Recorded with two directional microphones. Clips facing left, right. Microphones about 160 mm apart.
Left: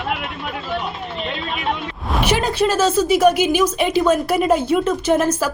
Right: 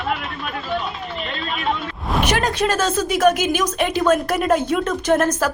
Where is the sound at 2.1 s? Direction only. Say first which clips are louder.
Left 1 dB; 5° left (ahead or behind).